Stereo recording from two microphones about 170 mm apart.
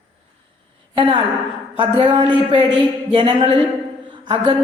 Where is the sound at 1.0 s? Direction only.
30° right (ahead or behind).